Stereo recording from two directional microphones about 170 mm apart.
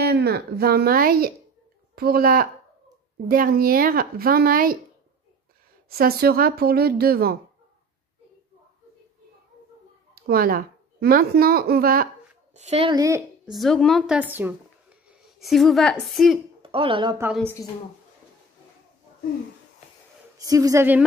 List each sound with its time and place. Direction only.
0.0 s speech: 70° right (ahead or behind)
5.9 s speech: 65° right (ahead or behind)
10.1 s a woman's voice: 60° right (ahead or behind)
12.5 s a woman's voice: 40° right (ahead or behind)
12.9 s a woman's voice: 20° right (ahead or behind)
13.5 s speech: centre (ahead or behind)
16.6 s speech: 30° right (ahead or behind)
20.3 s a woman's voice: 20° right (ahead or behind)